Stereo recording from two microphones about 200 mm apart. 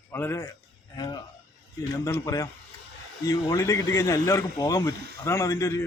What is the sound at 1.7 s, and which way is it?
Speech, 15° left (ahead or behind).